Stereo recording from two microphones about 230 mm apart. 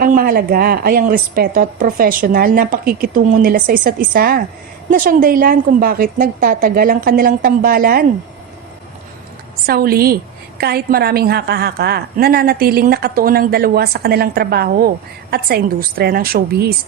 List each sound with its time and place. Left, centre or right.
0.0 s a woman's voice: right
9.6 s a woman's voice: right